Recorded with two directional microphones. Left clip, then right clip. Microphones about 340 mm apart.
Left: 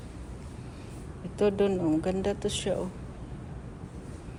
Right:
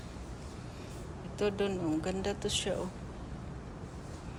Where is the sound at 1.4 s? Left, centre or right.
Centre.